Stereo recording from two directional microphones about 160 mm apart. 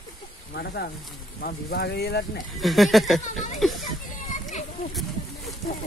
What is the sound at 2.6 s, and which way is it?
Speech, centre (ahead or behind).